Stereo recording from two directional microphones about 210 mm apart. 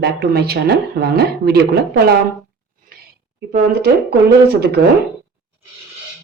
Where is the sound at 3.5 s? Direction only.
40° right (ahead or behind).